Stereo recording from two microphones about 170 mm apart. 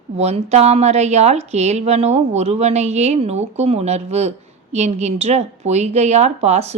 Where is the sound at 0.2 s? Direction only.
40° right (ahead or behind).